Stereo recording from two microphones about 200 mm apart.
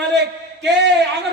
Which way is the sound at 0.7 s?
60° right (ahead or behind).